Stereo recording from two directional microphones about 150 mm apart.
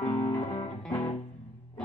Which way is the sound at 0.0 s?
25° left (ahead or behind).